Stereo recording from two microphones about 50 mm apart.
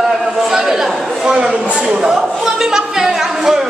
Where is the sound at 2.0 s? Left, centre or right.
Centre.